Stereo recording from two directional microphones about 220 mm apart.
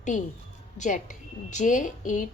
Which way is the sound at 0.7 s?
35° left (ahead or behind).